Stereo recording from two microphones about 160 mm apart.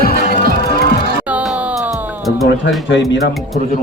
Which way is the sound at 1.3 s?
10° right (ahead or behind).